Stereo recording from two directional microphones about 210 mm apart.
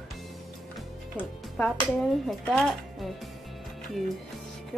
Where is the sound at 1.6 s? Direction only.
5° left (ahead or behind).